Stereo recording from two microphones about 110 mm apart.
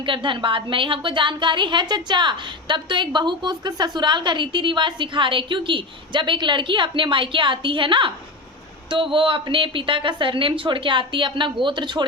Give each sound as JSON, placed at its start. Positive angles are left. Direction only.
{"t": 0.0, "sound": "a woman's voice", "side_deg": -50}